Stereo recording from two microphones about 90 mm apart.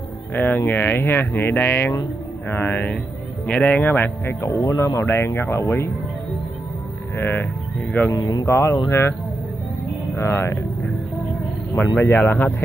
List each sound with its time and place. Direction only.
0.3 s speech: 20° left (ahead or behind)
7.2 s speech: 25° left (ahead or behind)
8.1 s speech: 50° left (ahead or behind)
8.5 s speech: 30° left (ahead or behind)
10.1 s speech: 30° left (ahead or behind)
11.7 s speech: 25° left (ahead or behind)